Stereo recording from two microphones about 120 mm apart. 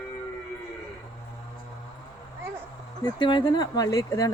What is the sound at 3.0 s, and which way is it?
A woman's voice, 40° left (ahead or behind).